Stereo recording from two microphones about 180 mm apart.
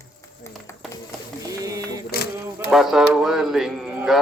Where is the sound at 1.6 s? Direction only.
20° right (ahead or behind).